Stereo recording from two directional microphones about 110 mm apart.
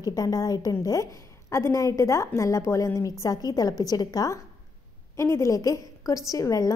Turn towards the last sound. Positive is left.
turn(degrees=30)  # may be behind; listen again after turning